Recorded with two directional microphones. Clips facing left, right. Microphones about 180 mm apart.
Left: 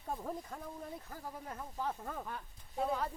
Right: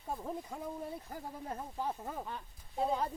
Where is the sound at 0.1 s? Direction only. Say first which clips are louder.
Right 1 dB; 5° right (ahead or behind).